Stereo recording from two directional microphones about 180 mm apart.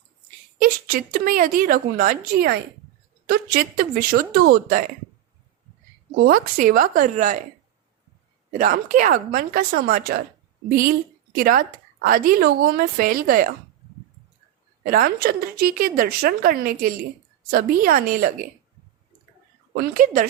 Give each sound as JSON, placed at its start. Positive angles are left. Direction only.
{"t": 0.6, "sound": "a woman's voice", "side_deg": -50}
{"t": 6.1, "sound": "a woman's voice", "side_deg": -55}
{"t": 8.5, "sound": "a woman's voice", "side_deg": -45}
{"t": 11.3, "sound": "a woman's voice", "side_deg": -55}
{"t": 14.8, "sound": "a woman's voice", "side_deg": -55}
{"t": 19.7, "sound": "a woman's voice", "side_deg": -50}